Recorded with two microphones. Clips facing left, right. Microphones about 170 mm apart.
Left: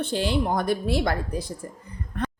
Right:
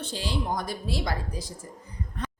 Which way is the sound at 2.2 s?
60° left (ahead or behind).